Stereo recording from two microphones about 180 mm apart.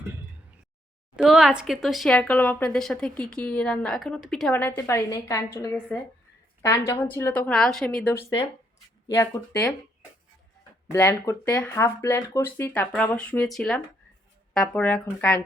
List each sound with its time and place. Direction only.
1.1 s speech: 5° right (ahead or behind); by 9.6 s 15° left (ahead or behind)
10.9 s speech: 15° left (ahead or behind)